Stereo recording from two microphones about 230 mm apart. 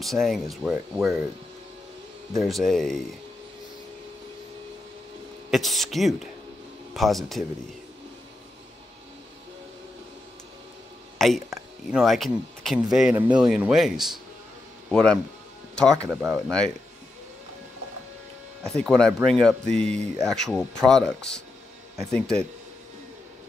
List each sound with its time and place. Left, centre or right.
0.0 s speech: centre
2.4 s speech: centre
5.5 s speech: centre
11.1 s speech: centre
18.6 s speech: centre